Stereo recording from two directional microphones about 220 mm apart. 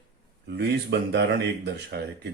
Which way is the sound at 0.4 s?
50° right (ahead or behind).